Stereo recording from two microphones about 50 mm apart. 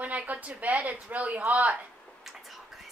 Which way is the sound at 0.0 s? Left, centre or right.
Right.